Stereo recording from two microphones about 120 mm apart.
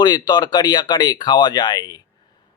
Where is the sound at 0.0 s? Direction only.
35° left (ahead or behind).